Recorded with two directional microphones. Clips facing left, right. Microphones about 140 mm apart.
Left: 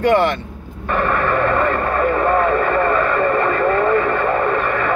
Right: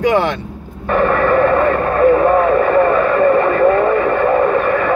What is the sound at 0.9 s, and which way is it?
Radio, 10° right (ahead or behind).